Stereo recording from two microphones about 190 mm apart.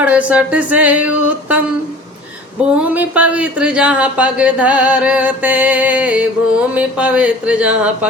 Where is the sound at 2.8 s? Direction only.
10° right (ahead or behind).